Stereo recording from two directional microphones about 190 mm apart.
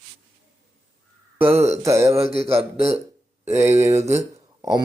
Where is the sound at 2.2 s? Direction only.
30° right (ahead or behind).